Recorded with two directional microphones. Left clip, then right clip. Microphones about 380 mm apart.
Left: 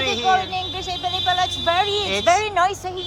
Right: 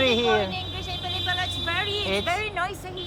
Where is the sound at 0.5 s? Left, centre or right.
Centre.